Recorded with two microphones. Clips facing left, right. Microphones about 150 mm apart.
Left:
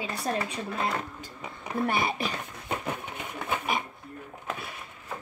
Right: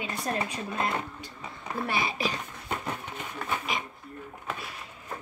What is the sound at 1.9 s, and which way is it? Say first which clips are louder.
Speech: even; 55° left (ahead or behind).